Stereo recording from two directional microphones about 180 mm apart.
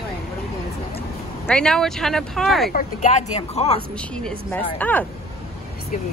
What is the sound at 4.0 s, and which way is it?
Speech, 5° left (ahead or behind).